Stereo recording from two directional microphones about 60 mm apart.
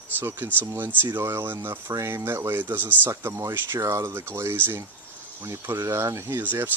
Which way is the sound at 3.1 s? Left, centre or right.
Right.